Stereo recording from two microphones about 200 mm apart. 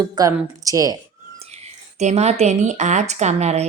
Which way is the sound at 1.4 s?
30° right (ahead or behind).